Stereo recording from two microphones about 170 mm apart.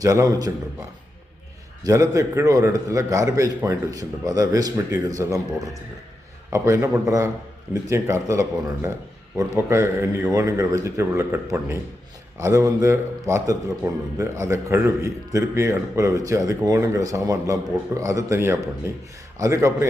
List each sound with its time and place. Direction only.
0.0 s a man's voice: 20° right (ahead or behind)
1.8 s a man's voice: 20° right (ahead or behind)